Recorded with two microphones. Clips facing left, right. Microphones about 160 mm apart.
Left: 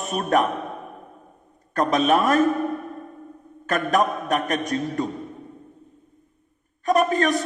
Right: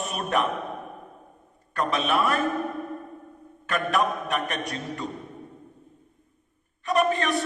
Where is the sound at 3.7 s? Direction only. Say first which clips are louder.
Left 4 dB; 40° left (ahead or behind).